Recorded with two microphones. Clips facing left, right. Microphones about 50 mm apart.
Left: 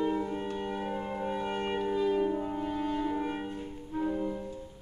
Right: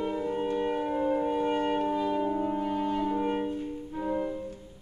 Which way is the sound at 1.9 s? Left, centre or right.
Centre.